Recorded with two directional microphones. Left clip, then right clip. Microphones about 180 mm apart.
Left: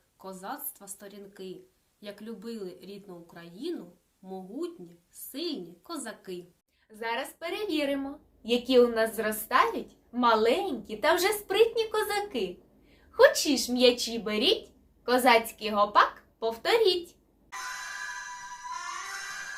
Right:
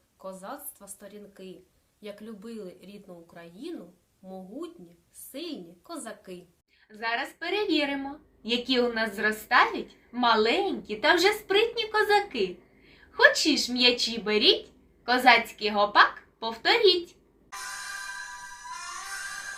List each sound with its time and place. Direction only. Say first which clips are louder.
0.2 s a woman's voice: even; 10° right (ahead or behind)
5.3 s a woman's voice: left 3 dB; 5° right (ahead or behind)
7.0 s a woman's voice: right 3 dB; 20° left (ahead or behind)